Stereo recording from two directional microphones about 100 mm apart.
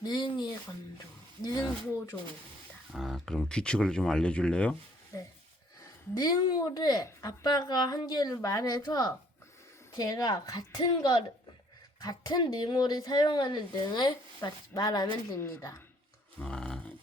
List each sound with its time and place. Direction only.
0.0 s speech: 45° left (ahead or behind)
2.9 s speech: centre (ahead or behind)
6.1 s a woman's voice: 40° left (ahead or behind)
15.4 s a woman's voice: 30° left (ahead or behind)
16.4 s a sound: 10° left (ahead or behind)